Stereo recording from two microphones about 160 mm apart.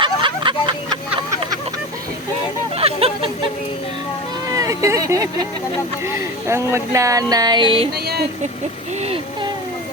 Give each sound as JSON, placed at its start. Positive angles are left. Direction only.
{"t": 0.0, "sound": "vehicle", "side_deg": -30}
{"t": 2.7, "sound": "a sound", "side_deg": -40}
{"t": 4.5, "sound": "speech", "side_deg": -20}
{"t": 7.9, "sound": "speech", "side_deg": -80}